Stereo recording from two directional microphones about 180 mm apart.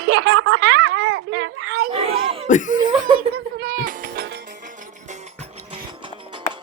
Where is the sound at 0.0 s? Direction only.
65° right (ahead or behind).